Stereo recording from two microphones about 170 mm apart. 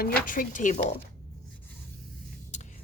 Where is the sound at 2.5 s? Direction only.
45° left (ahead or behind).